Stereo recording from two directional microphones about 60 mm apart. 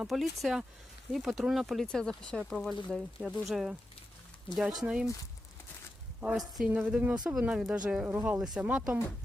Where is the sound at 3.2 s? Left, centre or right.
Centre.